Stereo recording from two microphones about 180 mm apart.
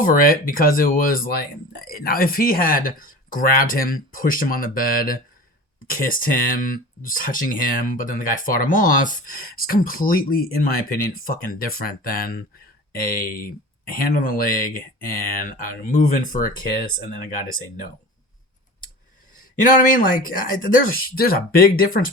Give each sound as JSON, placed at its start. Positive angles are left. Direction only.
{"t": 0.0, "sound": "speech", "side_deg": 50}
{"t": 19.7, "sound": "speech", "side_deg": 45}